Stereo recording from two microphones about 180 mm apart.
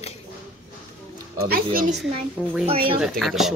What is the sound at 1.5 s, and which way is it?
Speech, 55° right (ahead or behind).